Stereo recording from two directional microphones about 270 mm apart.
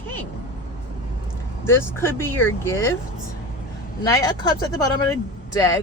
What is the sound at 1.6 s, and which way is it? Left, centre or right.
Speech, centre.